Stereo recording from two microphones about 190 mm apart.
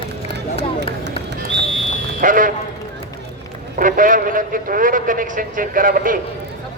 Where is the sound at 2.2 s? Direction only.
45° right (ahead or behind).